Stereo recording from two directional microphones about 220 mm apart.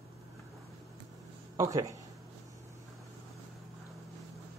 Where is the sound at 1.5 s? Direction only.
15° right (ahead or behind).